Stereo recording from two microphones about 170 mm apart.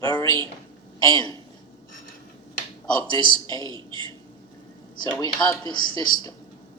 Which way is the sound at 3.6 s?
30° right (ahead or behind).